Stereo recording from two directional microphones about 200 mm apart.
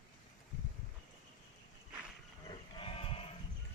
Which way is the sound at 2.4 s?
25° left (ahead or behind).